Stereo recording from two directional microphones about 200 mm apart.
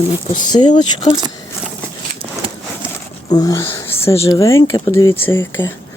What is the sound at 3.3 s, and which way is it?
Speech, 20° left (ahead or behind).